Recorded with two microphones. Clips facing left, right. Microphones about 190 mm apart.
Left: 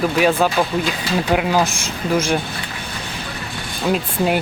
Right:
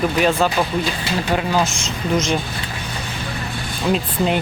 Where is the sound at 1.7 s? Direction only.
55° left (ahead or behind).